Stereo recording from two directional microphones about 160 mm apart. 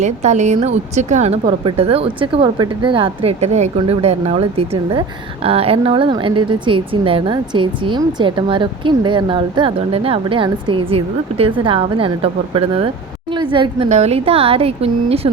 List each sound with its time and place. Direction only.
0.0 s a woman's voice: 45° right (ahead or behind)
1.5 s a woman's voice: 35° right (ahead or behind)
13.8 s speech: 45° right (ahead or behind)